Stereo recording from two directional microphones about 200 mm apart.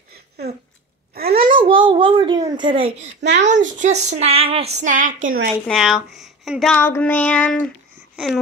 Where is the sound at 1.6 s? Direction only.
25° right (ahead or behind).